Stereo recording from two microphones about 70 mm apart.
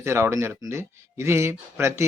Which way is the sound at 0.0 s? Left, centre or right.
Right.